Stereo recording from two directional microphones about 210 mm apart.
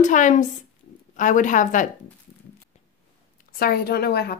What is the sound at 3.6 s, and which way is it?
Speech, 50° left (ahead or behind).